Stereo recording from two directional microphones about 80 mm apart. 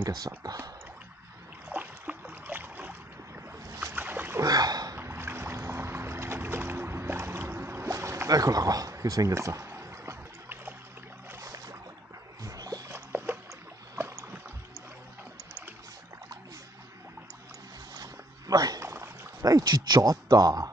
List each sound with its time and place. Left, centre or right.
0.0 s speech: right
1.7 s boat: right
3.9 s boat: right
4.5 s boat: right
4.9 s boat: right
9.7 s music: right
11.4 s a sound: right
12.4 s music: right
12.9 s boat: right
17.9 s a sound: right
19.4 s speech: right